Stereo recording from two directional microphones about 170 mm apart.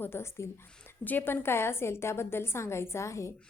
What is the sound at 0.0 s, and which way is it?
A woman's voice, 15° left (ahead or behind).